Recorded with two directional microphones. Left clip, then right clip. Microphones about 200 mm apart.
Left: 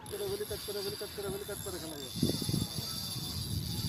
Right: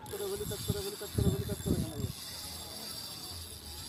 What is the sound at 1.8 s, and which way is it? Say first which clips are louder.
Snake: left 4 dB; 15° right (ahead or behind).